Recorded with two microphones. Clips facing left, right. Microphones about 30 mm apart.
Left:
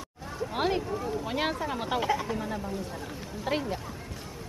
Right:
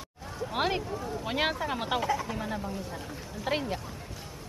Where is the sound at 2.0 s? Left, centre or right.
Centre.